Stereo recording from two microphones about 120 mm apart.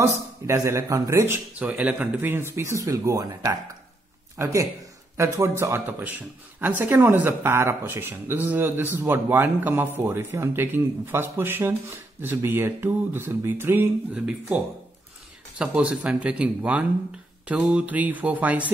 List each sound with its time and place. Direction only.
0.0 s speech: 25° right (ahead or behind)